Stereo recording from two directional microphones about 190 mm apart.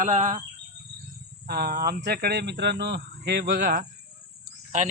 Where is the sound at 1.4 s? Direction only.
55° right (ahead or behind).